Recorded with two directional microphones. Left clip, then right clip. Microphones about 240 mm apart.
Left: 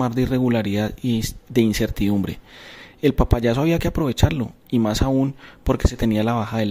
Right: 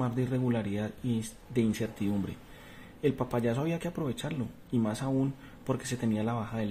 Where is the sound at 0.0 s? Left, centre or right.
Left.